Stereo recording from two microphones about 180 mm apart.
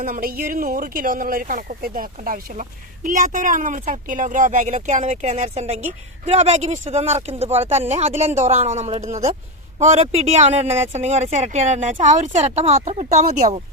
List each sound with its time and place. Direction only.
0.0 s speech: 55° right (ahead or behind)